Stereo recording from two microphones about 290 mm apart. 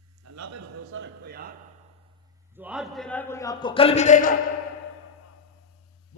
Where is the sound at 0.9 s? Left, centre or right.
Right.